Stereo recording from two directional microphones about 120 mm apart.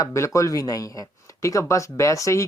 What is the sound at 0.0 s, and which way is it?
Speech, 25° left (ahead or behind).